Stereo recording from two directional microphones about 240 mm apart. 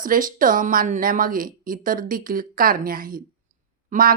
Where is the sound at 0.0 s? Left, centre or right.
Right.